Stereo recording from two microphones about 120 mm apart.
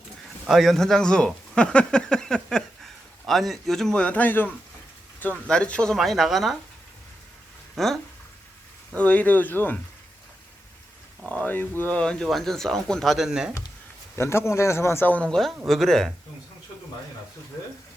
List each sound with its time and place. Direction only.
0.4 s speech: centre (ahead or behind)
7.8 s speech: centre (ahead or behind)
9.0 s speech: 10° left (ahead or behind)
11.3 s speech: 15° left (ahead or behind); by 13.5 s 5° right (ahead or behind)
14.2 s speech: 20° left (ahead or behind); by 16.1 s 5° left (ahead or behind)